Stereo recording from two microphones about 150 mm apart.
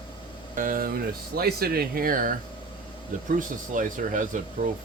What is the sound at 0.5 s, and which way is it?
Speech, 65° right (ahead or behind).